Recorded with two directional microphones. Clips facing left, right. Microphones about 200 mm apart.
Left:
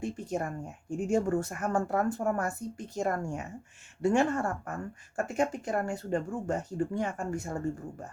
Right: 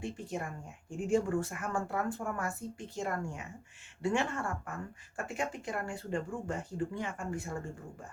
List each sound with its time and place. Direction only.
0.0 s speech: 45° left (ahead or behind)